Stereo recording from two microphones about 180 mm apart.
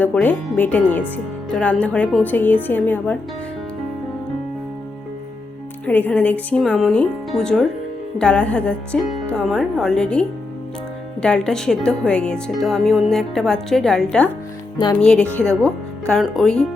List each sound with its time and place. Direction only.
0.0 s speech: 10° left (ahead or behind)
5.8 s speech: 10° left (ahead or behind)
15.3 s speech: 15° right (ahead or behind)
15.6 s speech: centre (ahead or behind)